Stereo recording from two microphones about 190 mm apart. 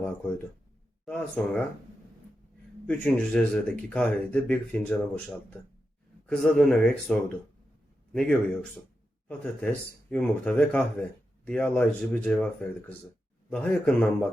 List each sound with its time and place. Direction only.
1.0 s speech: 5° left (ahead or behind)
2.8 s speech: 5° left (ahead or behind)
9.4 s speech: 5° left (ahead or behind)
13.5 s speech: 5° left (ahead or behind)